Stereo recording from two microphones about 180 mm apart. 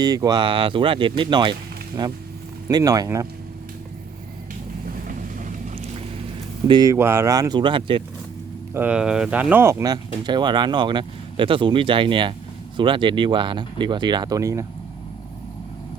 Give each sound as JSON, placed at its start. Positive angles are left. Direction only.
{"t": 0.0, "sound": "speech", "side_deg": -20}
{"t": 6.7, "sound": "speech", "side_deg": -20}
{"t": 8.7, "sound": "speech", "side_deg": -10}